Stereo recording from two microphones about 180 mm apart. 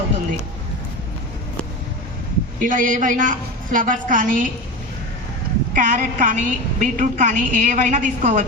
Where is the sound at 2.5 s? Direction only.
50° right (ahead or behind).